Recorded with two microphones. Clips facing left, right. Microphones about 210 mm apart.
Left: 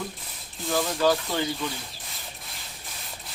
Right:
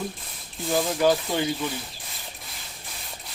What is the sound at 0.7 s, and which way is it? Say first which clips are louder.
Speech: right 2 dB; 15° right (ahead or behind).